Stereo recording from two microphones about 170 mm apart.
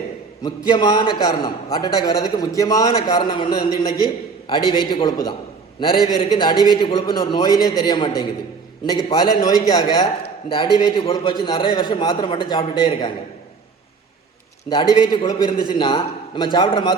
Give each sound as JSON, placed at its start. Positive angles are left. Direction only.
{"t": 0.4, "sound": "a man's voice", "side_deg": 25}
{"t": 14.7, "sound": "a man's voice", "side_deg": 25}